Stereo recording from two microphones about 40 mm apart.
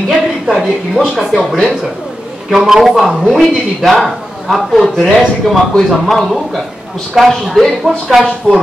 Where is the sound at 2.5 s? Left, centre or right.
Centre.